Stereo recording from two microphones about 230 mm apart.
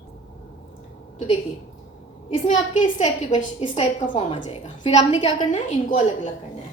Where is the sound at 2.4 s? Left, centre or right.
Left.